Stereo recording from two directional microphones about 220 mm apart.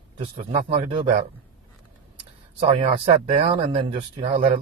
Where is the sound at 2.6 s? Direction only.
25° right (ahead or behind).